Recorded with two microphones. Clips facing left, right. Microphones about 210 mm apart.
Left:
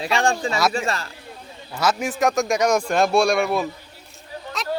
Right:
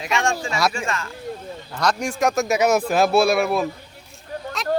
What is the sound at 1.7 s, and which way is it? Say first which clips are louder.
A man's voice: left 1 dB; 5° left (ahead or behind).